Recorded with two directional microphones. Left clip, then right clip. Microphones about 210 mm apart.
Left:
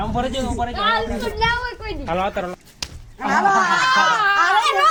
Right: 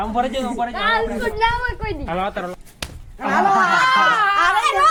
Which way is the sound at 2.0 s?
45° left (ahead or behind).